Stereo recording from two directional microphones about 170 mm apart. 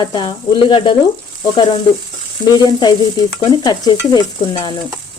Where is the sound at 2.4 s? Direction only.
25° left (ahead or behind).